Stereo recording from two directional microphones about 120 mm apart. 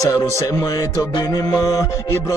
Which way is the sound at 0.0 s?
30° left (ahead or behind).